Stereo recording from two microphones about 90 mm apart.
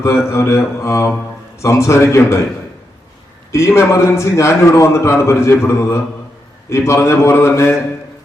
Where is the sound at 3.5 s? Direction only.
30° left (ahead or behind).